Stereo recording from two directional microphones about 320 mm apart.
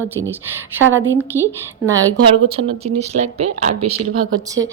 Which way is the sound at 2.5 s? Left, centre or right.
Centre.